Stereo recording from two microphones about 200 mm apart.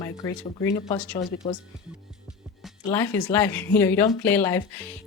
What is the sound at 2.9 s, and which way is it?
Speech, 15° left (ahead or behind).